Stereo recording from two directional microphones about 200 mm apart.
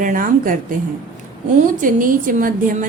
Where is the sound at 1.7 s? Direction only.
45° right (ahead or behind).